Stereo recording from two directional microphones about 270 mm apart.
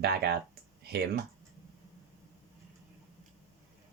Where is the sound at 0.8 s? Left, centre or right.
Right.